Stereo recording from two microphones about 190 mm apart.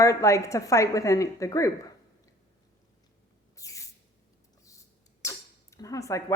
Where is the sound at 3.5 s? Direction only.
15° left (ahead or behind).